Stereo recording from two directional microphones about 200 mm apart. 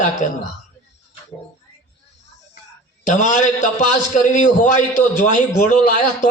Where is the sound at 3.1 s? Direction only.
35° left (ahead or behind).